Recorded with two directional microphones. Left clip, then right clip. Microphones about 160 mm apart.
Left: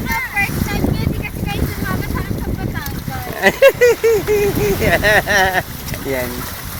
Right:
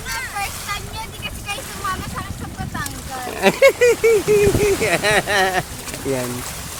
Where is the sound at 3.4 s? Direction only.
10° right (ahead or behind).